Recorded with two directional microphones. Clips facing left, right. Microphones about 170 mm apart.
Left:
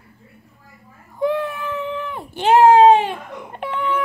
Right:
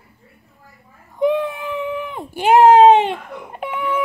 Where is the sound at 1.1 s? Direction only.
20° right (ahead or behind).